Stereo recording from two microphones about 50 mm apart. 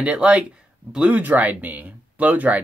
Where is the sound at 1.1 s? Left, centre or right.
Right.